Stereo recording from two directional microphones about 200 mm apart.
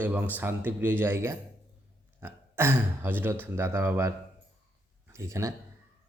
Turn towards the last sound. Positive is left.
turn(degrees=-15)  # may be behind; listen again after turning